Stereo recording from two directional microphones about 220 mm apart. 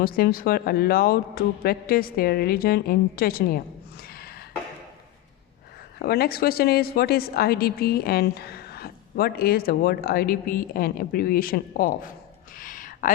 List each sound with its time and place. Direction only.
0.0 s speech: 40° left (ahead or behind)
6.0 s speech: 45° left (ahead or behind)
12.5 s a sound: 40° left (ahead or behind)